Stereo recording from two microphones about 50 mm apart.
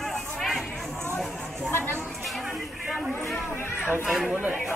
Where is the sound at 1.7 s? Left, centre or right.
Left.